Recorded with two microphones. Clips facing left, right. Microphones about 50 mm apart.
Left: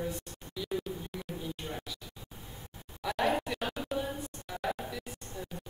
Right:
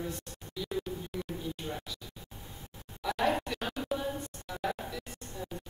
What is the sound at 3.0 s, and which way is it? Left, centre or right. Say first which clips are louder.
Music: even; centre.